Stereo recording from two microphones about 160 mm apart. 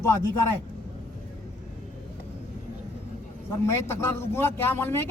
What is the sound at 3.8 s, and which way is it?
A man's voice, 15° left (ahead or behind).